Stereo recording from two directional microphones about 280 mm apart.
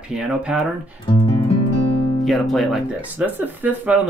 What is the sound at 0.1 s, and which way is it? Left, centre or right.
Speech, centre.